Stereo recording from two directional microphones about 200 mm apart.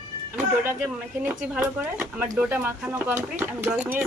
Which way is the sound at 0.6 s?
5° right (ahead or behind).